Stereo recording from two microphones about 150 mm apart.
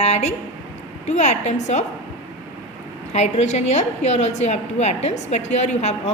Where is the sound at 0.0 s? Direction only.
45° left (ahead or behind).